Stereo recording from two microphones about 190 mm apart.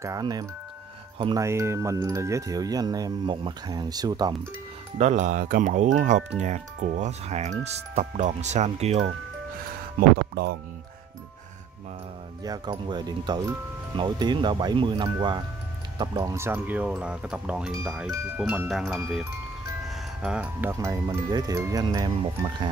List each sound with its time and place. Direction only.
0.0 s speech: 20° right (ahead or behind)
1.4 s speech: 15° right (ahead or behind)
4.9 s speech: 40° right (ahead or behind)
9.9 s speech: 55° right (ahead or behind)
12.4 s speech: 20° right (ahead or behind)